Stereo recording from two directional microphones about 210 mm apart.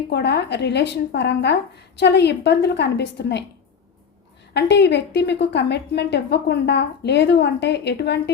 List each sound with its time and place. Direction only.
0.1 s a woman's voice: 55° left (ahead or behind)
4.5 s a woman's voice: 55° left (ahead or behind)